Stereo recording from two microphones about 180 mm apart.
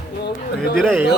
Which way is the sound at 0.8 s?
Centre (ahead or behind).